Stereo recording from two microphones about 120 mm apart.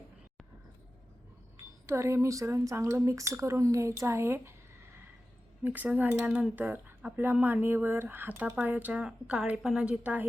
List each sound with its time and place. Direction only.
1.9 s speech: 25° right (ahead or behind)
5.6 s speech: 15° right (ahead or behind)